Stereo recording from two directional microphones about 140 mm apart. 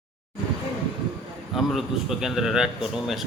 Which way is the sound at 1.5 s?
Centre (ahead or behind).